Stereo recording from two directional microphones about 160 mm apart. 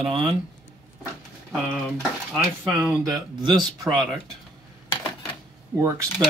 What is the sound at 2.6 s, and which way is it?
Speech, 5° right (ahead or behind).